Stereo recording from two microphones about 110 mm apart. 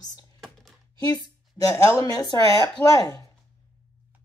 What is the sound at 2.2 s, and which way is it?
Speech, 35° left (ahead or behind).